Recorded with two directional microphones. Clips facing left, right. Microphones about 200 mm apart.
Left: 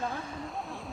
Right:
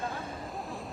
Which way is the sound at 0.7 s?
Centre (ahead or behind).